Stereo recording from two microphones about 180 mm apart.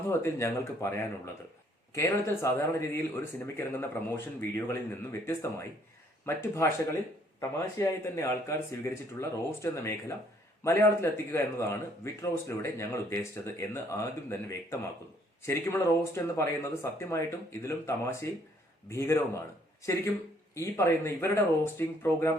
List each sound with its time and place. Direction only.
0.1 s speech: 15° left (ahead or behind)
20.6 s speech: 15° left (ahead or behind)